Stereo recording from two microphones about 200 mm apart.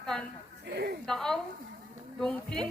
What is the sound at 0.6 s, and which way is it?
Speech, 55° right (ahead or behind).